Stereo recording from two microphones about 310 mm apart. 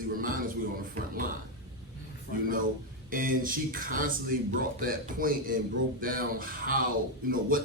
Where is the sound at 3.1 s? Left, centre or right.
Right.